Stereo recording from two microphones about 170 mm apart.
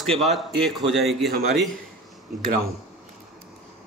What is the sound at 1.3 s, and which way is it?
Speech, 65° right (ahead or behind).